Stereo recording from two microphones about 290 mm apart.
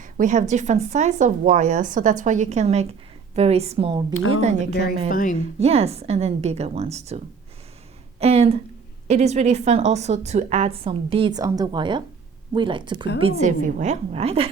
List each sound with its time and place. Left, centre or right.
0.0 s a woman's voice: right
4.1 s a woman's voice: left
4.4 s a woman's voice: right
5.0 s speech: left
5.5 s a woman's voice: right
8.2 s a woman's voice: right